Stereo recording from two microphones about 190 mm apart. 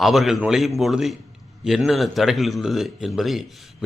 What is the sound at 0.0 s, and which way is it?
A man's voice, centre (ahead or behind).